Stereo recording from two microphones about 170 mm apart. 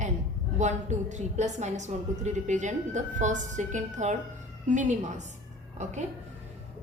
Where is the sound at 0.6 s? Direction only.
45° right (ahead or behind).